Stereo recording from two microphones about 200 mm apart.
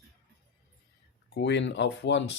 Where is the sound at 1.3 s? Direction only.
60° left (ahead or behind).